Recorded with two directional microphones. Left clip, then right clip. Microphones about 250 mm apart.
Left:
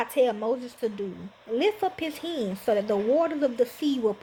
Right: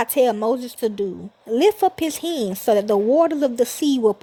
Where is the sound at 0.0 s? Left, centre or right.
Right.